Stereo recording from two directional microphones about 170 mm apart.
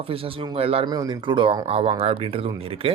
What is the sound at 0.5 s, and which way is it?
Speech, 35° right (ahead or behind).